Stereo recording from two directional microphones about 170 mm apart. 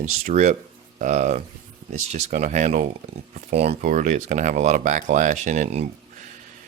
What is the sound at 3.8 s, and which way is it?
Speech, 45° right (ahead or behind).